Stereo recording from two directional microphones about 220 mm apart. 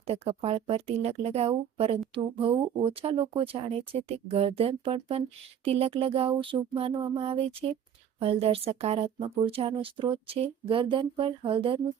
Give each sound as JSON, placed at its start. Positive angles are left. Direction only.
{"t": 0.0, "sound": "a woman's voice", "side_deg": -25}